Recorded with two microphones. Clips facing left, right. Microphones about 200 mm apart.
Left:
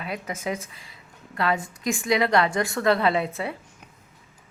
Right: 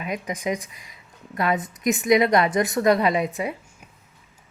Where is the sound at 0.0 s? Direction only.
15° right (ahead or behind).